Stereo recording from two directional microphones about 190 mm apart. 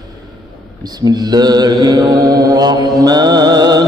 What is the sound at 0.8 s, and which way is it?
Mantra, 20° right (ahead or behind).